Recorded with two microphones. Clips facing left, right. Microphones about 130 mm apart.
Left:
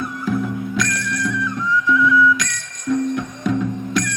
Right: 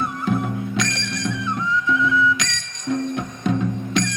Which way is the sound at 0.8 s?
25° right (ahead or behind).